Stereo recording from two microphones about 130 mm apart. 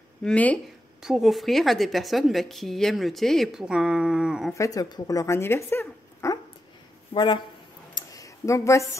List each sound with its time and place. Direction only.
0.2 s speech: 10° left (ahead or behind)
1.0 s speech: centre (ahead or behind)
4.6 s speech: 25° left (ahead or behind)
7.1 s speech: 45° left (ahead or behind)
7.9 s tick-tock: 25° left (ahead or behind)